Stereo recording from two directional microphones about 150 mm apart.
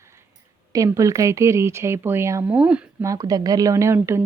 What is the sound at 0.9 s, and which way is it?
A woman's voice, 20° right (ahead or behind).